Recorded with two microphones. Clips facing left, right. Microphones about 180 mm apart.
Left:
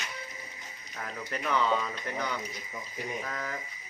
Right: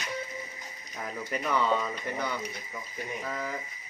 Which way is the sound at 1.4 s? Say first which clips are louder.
Even; 5° right (ahead or behind).